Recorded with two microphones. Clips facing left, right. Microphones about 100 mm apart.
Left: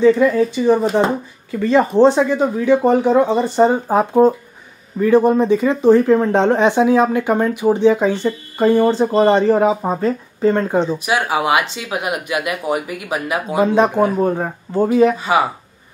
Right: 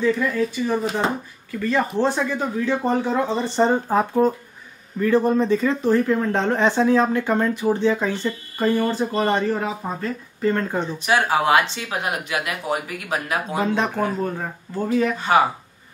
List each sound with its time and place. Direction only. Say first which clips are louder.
0.0 s speech: left 8 dB; 30° left (ahead or behind); by 3.8 s 10° left (ahead or behind)
3.8 s speech: left 6 dB; 20° left (ahead or behind)
9.5 s speech: left 10 dB; 40° left (ahead or behind)
10.4 s speech: left 6 dB; 20° left (ahead or behind)
14.2 s speech: left 8 dB; 35° left (ahead or behind)
15.1 s speech: left 1 dB; 5° left (ahead or behind)